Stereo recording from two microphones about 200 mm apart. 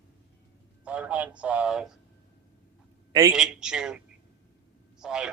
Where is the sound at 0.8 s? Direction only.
5° right (ahead or behind).